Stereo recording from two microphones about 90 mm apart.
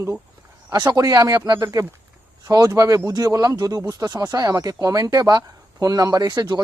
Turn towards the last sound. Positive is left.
turn(degrees=-50)  # may be behind; listen again after turning